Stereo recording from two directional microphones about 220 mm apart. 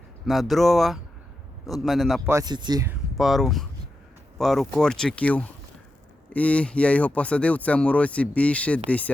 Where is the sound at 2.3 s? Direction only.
20° right (ahead or behind).